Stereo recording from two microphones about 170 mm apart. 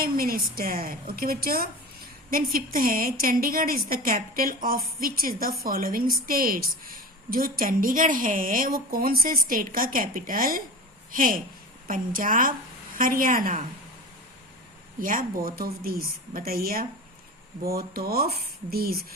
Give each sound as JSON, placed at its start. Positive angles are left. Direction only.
{"t": 0.0, "sound": "a woman's voice", "side_deg": -60}
{"t": 15.0, "sound": "a woman's voice", "side_deg": -55}